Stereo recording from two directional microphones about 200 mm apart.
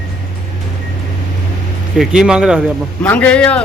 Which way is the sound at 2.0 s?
5° right (ahead or behind).